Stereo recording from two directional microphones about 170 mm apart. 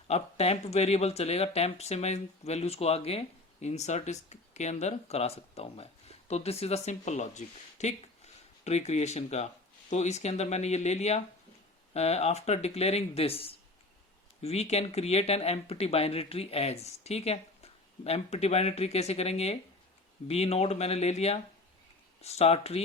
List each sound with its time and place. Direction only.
0.1 s speech: 40° left (ahead or behind)